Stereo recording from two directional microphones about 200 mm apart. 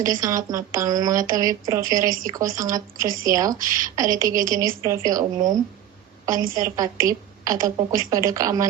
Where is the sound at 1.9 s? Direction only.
45° right (ahead or behind).